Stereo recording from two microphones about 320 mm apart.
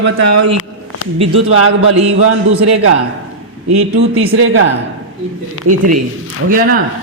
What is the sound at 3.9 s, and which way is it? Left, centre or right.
Speech, right.